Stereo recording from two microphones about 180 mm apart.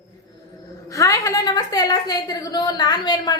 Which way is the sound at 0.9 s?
15° left (ahead or behind).